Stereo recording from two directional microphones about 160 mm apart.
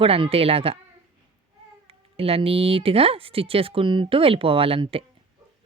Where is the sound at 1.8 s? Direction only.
35° right (ahead or behind).